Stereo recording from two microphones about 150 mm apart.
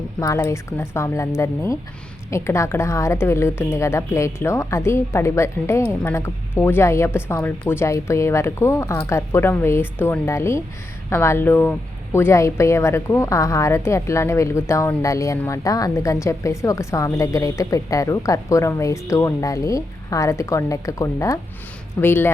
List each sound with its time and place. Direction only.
0.2 s a woman's voice: 20° left (ahead or behind)